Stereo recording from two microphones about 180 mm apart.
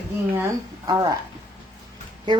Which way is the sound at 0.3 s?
15° right (ahead or behind).